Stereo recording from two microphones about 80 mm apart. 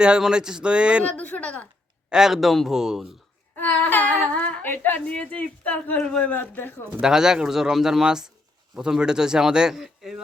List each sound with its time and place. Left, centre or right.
0.0 s speech: centre
1.1 s speech: centre
2.0 s speech: centre
3.8 s humming: left
4.6 s a woman's voice: left
6.3 s a woman's voice: left
7.0 s speech: centre